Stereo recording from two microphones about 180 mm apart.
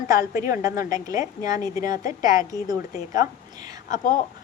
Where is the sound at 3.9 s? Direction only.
45° left (ahead or behind).